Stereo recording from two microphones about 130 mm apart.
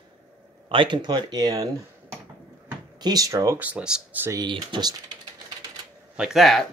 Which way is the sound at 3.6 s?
5° right (ahead or behind).